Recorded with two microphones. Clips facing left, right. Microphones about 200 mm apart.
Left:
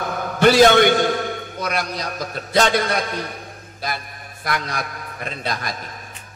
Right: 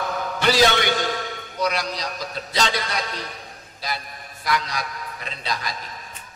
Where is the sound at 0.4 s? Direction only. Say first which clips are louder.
Left 7 dB; 50° left (ahead or behind).